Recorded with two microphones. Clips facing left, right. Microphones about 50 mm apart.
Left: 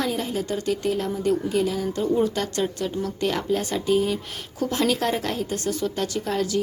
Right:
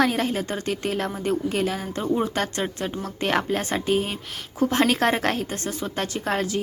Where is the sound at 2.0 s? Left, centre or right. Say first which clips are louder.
Left 1 dB; right.